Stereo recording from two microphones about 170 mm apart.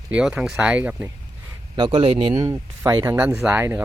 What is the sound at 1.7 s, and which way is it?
Speech, 25° right (ahead or behind).